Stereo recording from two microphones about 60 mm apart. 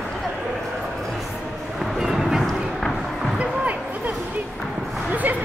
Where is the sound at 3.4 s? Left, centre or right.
Right.